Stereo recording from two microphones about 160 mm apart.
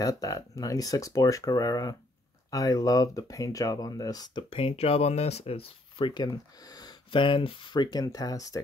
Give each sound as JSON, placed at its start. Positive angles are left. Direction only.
{"t": 0.0, "sound": "speech", "side_deg": 20}